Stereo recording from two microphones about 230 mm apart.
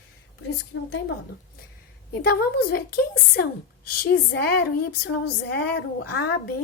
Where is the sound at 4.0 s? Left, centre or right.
Left.